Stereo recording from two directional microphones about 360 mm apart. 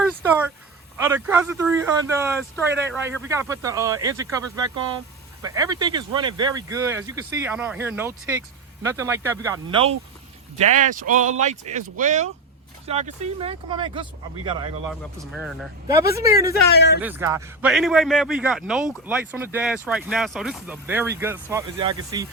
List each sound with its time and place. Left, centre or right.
0.0 s a sound: centre
0.9 s speech: centre
10.6 s speech: right
14.8 s a man's voice: centre
16.7 s speech: left
17.0 s a man's voice: centre